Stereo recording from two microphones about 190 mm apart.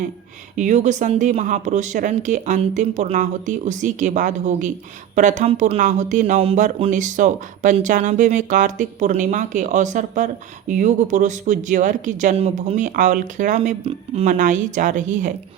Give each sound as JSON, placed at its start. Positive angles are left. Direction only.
{"t": 0.5, "sound": "speech", "side_deg": -40}